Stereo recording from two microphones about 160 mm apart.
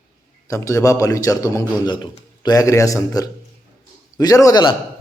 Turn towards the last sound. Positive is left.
turn(degrees=25)  # may be behind; listen again after turning